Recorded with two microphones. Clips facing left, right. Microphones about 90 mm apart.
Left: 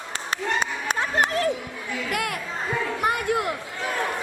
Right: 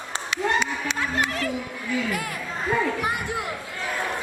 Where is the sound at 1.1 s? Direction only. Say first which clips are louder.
Left 6 dB; 45° left (ahead or behind).